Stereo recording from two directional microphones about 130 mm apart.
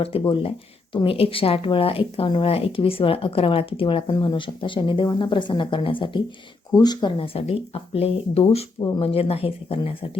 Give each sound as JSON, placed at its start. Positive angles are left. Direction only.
{"t": 0.0, "sound": "speech", "side_deg": 45}